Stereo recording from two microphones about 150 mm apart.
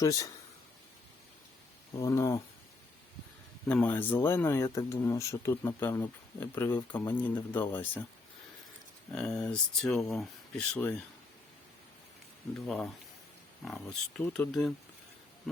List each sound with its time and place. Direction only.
0.0 s speech: 20° left (ahead or behind)
2.0 s speech: 20° left (ahead or behind)
3.7 s speech: 10° left (ahead or behind)
9.1 s speech: 5° left (ahead or behind)
10.8 s speech: 10° left (ahead or behind)
12.5 s speech: 5° left (ahead or behind)
14.2 s speech: 10° left (ahead or behind)